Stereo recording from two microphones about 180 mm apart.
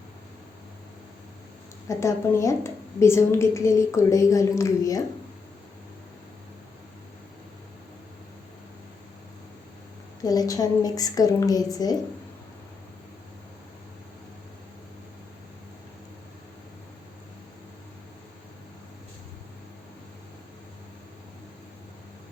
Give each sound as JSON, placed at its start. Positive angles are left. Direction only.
{"t": 1.9, "sound": "a woman's voice", "side_deg": 15}
{"t": 10.2, "sound": "a woman's voice", "side_deg": 20}